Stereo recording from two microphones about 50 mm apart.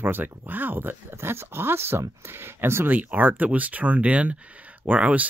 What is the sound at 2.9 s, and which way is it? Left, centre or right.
Speech, right.